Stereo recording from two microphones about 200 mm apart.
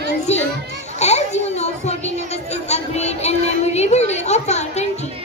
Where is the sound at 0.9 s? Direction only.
35° left (ahead or behind).